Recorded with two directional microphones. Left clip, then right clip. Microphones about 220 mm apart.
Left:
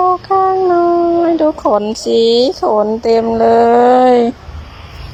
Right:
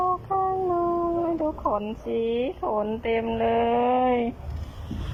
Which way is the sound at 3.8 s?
35° left (ahead or behind).